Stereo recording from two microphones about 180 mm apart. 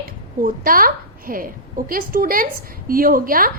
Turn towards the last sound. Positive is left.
turn(degrees=-50)  # may be behind; listen again after turning